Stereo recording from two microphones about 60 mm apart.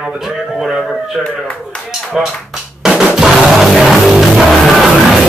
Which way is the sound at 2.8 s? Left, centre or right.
Centre.